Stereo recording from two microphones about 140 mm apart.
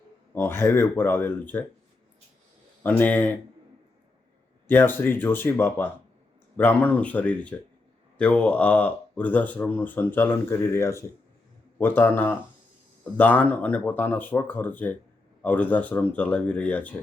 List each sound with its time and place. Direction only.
0.3 s speech: 15° left (ahead or behind)
2.8 s speech: 10° left (ahead or behind)
4.7 s speech: 15° left (ahead or behind)